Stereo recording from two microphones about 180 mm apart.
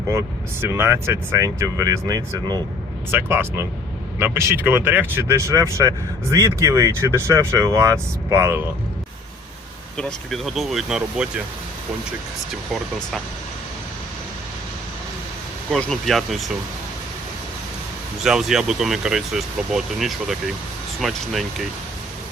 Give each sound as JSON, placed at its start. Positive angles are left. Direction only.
{"t": 0.1, "sound": "speech", "side_deg": -15}
{"t": 10.0, "sound": "speech", "side_deg": 5}
{"t": 15.7, "sound": "speech", "side_deg": 0}
{"t": 18.2, "sound": "speech", "side_deg": 0}